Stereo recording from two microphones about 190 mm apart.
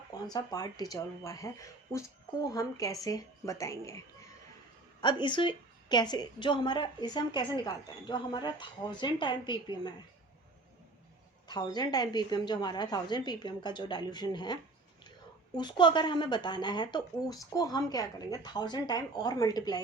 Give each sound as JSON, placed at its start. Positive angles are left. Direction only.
{"t": 0.3, "sound": "a woman's voice", "side_deg": 20}
{"t": 11.4, "sound": "a woman's voice", "side_deg": 20}